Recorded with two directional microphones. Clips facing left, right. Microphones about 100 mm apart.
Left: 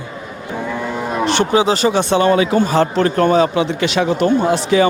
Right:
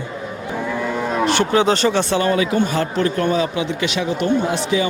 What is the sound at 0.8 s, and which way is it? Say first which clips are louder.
Cattle: right 1 dB; 5° left (ahead or behind).